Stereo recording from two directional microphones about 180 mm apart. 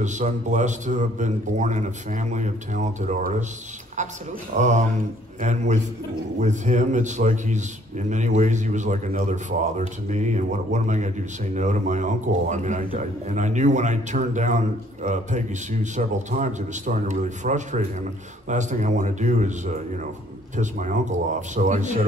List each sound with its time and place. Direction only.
0.0 s a man's voice: 40° right (ahead or behind)
4.6 s a man's voice: 40° right (ahead or behind)